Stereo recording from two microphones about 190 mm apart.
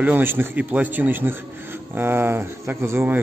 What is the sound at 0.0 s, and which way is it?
Speech, 10° right (ahead or behind).